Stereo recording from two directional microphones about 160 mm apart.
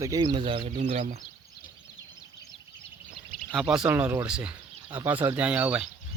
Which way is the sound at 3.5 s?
Centre (ahead or behind).